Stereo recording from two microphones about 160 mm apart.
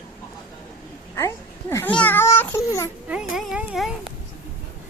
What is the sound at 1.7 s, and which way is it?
Baby cry, 10° left (ahead or behind).